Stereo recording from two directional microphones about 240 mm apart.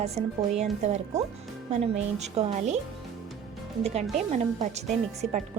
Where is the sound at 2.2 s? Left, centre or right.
Right.